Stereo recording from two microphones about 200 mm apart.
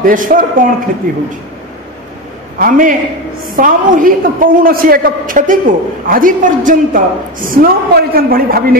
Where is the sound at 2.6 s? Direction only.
45° right (ahead or behind).